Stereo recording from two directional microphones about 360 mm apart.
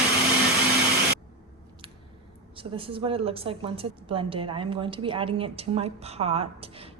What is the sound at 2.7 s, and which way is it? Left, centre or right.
A woman's voice, centre.